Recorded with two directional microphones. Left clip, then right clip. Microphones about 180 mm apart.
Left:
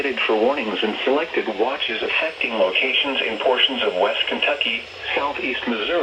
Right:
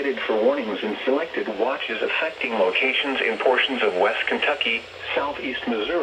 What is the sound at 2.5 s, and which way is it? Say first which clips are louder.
Speech: left 2 dB; 15° right (ahead or behind).